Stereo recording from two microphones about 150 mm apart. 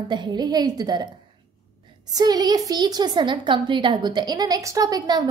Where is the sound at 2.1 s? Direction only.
25° right (ahead or behind).